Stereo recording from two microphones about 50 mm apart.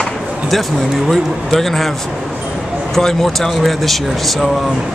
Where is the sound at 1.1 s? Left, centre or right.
Centre.